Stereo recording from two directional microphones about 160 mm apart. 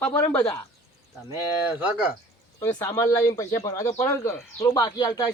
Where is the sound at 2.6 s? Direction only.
15° left (ahead or behind).